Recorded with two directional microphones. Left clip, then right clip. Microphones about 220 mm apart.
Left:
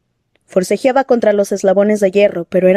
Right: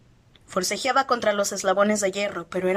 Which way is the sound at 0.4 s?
30° left (ahead or behind).